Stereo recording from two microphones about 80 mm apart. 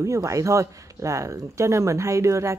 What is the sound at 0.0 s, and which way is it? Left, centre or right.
Speech, right.